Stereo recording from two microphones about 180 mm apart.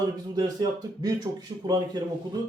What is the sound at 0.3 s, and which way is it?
Speech, 20° right (ahead or behind).